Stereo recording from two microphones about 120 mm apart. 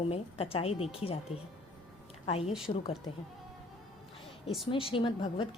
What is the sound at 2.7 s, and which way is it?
Speech, 45° left (ahead or behind).